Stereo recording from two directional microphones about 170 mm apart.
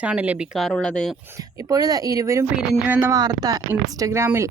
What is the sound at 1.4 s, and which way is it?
Speech, 20° right (ahead or behind).